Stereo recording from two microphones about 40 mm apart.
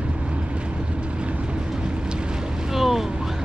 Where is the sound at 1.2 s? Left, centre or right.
Right.